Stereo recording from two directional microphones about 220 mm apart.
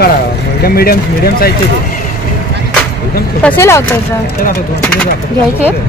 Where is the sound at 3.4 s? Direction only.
10° left (ahead or behind).